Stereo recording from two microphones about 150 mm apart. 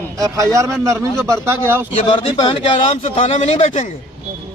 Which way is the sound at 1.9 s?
35° left (ahead or behind).